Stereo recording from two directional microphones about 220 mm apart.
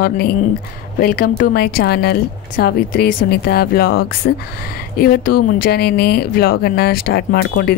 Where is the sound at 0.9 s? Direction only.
45° left (ahead or behind).